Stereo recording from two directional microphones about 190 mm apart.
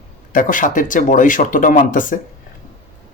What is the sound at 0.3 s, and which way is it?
Speech, 45° left (ahead or behind).